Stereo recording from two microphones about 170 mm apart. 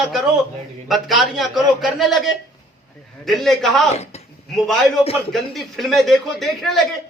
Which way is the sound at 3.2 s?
Centre (ahead or behind).